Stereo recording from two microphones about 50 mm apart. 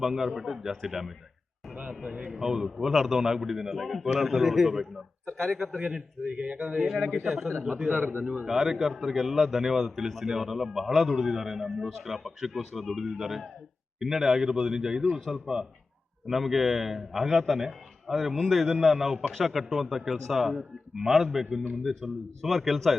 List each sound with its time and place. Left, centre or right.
0.0 s a man's voice: centre
1.8 s a man's voice: centre
5.2 s a man's voice: centre
5.9 s speech: right
6.7 s a man's voice: centre
7.9 s a man's voice: right
8.2 s a man's voice: centre
8.4 s a man's voice: centre